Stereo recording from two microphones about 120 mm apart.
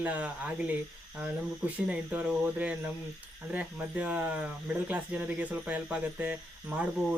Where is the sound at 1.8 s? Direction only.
10° right (ahead or behind).